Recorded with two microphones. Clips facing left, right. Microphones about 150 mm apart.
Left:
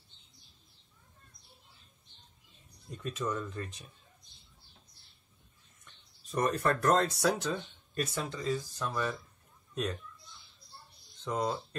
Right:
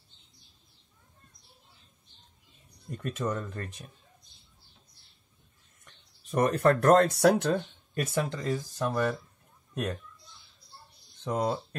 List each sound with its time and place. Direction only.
3.0 s speech: 55° right (ahead or behind)
6.3 s speech: 65° right (ahead or behind)
11.2 s speech: 55° right (ahead or behind)